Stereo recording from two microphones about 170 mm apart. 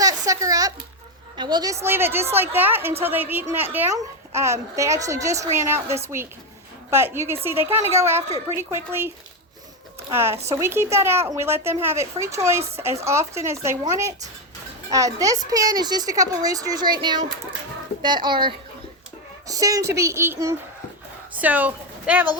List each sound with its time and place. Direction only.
0.0 s a sound: 20° right (ahead or behind)
1.4 s a child's voice: 25° right (ahead or behind)
14.8 s a woman's voice: 20° right (ahead or behind)